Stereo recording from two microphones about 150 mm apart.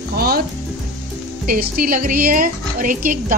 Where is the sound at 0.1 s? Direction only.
85° right.